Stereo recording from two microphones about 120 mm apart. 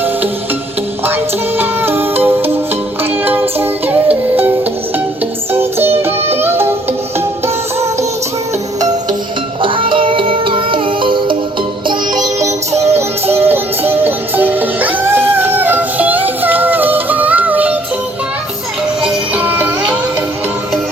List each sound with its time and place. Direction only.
1.0 s music: 20° right (ahead or behind)
5.5 s music: 20° right (ahead or behind)
9.6 s music: 45° right (ahead or behind)
11.9 s music: 35° right (ahead or behind); by 17.7 s 15° right (ahead or behind)
19.0 s music: 10° right (ahead or behind)